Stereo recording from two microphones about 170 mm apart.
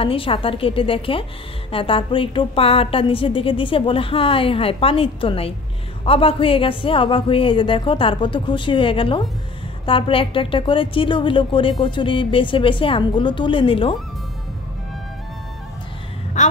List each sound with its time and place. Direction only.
0.0 s a woman's voice: 30° left (ahead or behind)
16.4 s speech: 45° left (ahead or behind)